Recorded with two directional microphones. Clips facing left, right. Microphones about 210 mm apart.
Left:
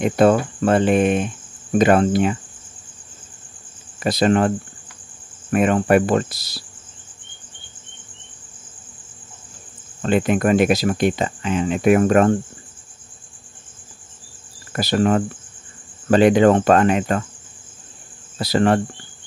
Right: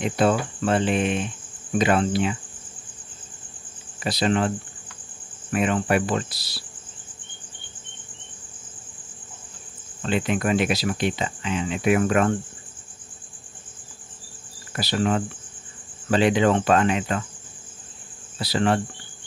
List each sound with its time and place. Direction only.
0.0 s speech: 50° left (ahead or behind)
4.0 s speech: 50° left (ahead or behind)
10.0 s speech: 50° left (ahead or behind)
14.7 s speech: 50° left (ahead or behind)
18.4 s speech: 45° left (ahead or behind)